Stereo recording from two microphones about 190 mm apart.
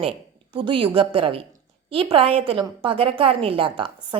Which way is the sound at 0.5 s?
25° right (ahead or behind).